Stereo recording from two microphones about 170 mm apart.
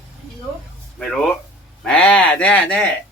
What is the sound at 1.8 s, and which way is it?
Speech, 5° left (ahead or behind).